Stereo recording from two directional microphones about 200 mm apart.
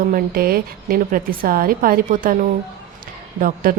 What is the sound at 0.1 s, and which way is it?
Speech, 45° right (ahead or behind).